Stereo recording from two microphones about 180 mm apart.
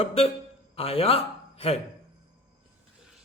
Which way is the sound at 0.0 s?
30° left (ahead or behind).